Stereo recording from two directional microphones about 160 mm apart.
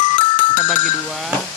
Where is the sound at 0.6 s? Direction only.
50° right (ahead or behind).